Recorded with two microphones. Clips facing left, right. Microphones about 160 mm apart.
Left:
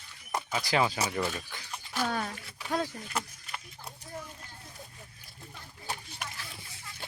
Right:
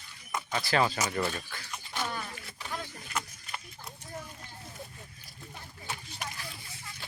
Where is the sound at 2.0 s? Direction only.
75° left (ahead or behind).